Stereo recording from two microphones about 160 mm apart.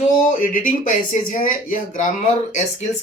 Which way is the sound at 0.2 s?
55° left (ahead or behind).